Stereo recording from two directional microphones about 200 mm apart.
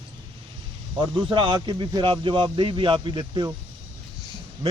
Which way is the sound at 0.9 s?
25° right (ahead or behind).